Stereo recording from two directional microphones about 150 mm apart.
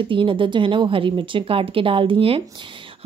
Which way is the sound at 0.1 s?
35° right (ahead or behind).